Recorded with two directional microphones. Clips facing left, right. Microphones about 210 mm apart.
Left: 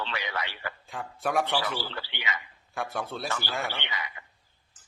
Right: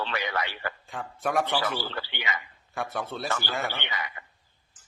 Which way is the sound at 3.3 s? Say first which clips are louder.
Right 2 dB; 55° right (ahead or behind).